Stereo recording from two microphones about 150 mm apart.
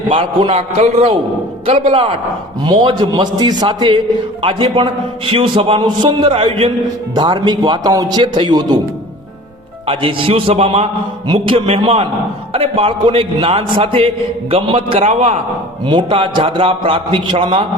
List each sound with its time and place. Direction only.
0.1 s a man's voice: 35° right (ahead or behind)
9.8 s a man's voice: 35° right (ahead or behind)
15.9 s a man's voice: 35° right (ahead or behind)